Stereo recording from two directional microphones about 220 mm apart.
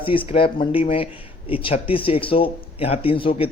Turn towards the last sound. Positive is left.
turn(degrees=25)  # may be behind; listen again after turning